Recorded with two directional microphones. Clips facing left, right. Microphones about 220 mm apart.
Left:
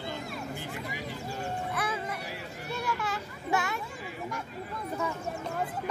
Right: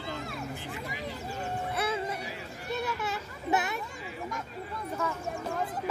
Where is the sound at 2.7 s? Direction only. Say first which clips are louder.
Right 1 dB; 20° right (ahead or behind).